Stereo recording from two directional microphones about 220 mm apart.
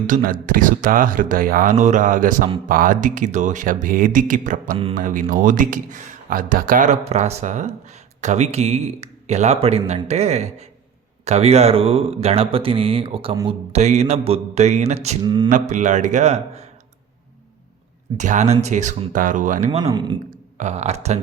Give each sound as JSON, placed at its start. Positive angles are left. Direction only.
{"t": 0.1, "sound": "speech", "side_deg": -40}
{"t": 15.2, "sound": "speech", "side_deg": -20}
{"t": 15.4, "sound": "speech", "side_deg": -35}
{"t": 18.2, "sound": "speech", "side_deg": -35}
{"t": 19.8, "sound": "speech", "side_deg": -20}
{"t": 20.6, "sound": "speech", "side_deg": -30}